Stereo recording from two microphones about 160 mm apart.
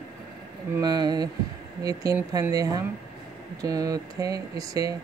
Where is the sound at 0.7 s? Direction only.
25° right (ahead or behind).